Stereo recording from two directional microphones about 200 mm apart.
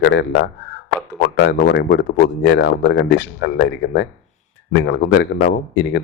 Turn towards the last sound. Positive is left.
turn(degrees=55)  # may be behind; listen again after turning